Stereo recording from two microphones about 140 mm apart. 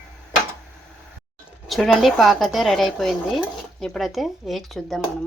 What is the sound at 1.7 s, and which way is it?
Speech, centre (ahead or behind).